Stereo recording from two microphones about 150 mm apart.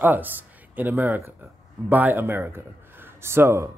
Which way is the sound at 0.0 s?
10° right (ahead or behind).